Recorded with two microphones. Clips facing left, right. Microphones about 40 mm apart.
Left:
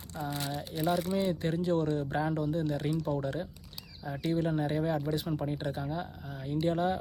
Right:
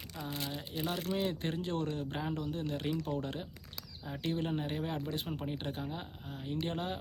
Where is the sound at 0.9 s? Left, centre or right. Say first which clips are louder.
Left 6 dB; right.